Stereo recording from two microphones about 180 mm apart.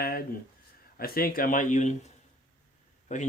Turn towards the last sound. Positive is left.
turn(degrees=40)  # may be behind; listen again after turning